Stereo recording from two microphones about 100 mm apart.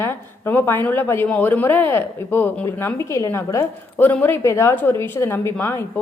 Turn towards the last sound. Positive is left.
turn(degrees=20)  # may be behind; listen again after turning